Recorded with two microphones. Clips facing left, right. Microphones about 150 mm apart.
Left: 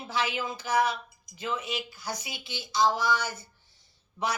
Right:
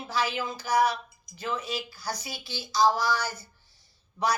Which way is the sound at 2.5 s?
35° right (ahead or behind).